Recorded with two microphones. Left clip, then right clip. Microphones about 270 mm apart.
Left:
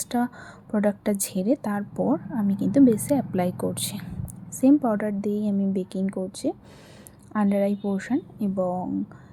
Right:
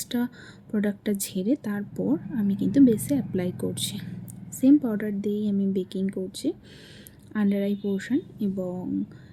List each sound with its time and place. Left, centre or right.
0.0 s a woman's voice: centre